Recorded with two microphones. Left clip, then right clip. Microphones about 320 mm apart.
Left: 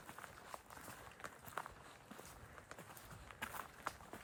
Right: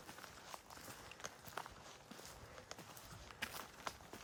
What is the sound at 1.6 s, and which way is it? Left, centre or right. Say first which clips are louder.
Walk: left 2 dB; centre.